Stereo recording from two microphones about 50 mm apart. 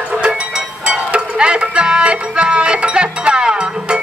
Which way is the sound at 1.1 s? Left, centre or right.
Right.